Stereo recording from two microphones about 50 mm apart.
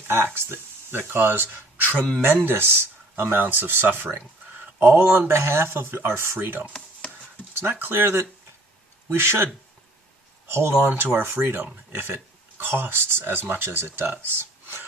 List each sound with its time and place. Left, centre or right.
0.3 s speech: right
5.4 s speech: right
7.6 s speech: right
10.8 s speech: right